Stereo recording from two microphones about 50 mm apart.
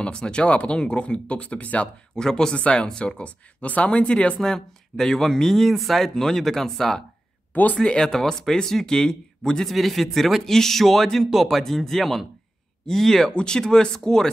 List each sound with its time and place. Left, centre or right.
0.0 s speech: centre
2.1 s speech: centre
4.4 s speech: centre
9.7 s a man's voice: centre
11.6 s a man's voice: centre